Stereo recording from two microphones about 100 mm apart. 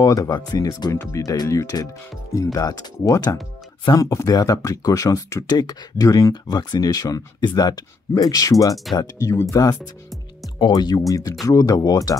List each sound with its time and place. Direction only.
0.0 s speech: 35° left (ahead or behind)